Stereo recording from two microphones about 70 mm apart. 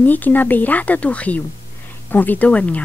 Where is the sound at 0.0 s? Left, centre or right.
Left.